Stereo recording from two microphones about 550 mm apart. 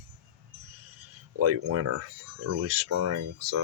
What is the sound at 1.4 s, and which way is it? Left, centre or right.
Speech, right.